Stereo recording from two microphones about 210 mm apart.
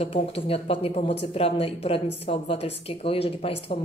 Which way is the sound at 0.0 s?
25° left (ahead or behind).